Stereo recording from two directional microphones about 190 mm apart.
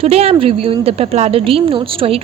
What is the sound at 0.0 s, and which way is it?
A woman's voice, 30° right (ahead or behind).